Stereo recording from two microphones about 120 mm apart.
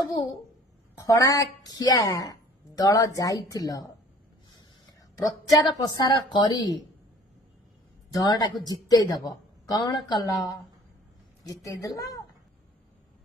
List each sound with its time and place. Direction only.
1.0 s a woman's voice: 30° left (ahead or behind)
5.5 s a woman's voice: 35° left (ahead or behind)
8.1 s a woman's voice: 30° left (ahead or behind)